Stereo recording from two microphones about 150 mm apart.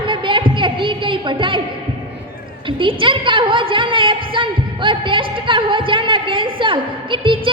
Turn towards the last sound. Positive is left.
turn(degrees=-35)  # may be behind; listen again after turning